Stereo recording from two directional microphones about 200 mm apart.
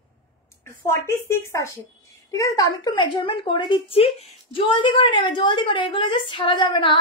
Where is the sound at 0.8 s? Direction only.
15° left (ahead or behind).